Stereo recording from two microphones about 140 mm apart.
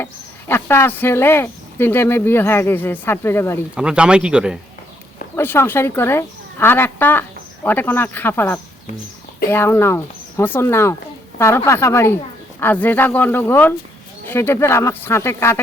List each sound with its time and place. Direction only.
0.0 s speech: 15° left (ahead or behind)
3.8 s a man's voice: 5° right (ahead or behind)
5.4 s speech: 15° left (ahead or behind)